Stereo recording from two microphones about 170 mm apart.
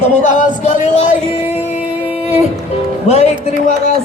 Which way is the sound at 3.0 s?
40° left (ahead or behind).